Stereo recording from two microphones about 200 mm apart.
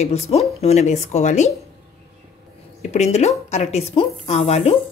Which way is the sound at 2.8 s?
35° left (ahead or behind).